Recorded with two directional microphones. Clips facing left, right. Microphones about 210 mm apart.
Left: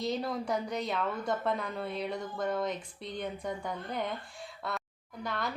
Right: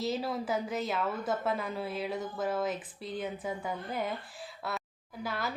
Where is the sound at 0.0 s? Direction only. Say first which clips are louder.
Even; 5° right (ahead or behind).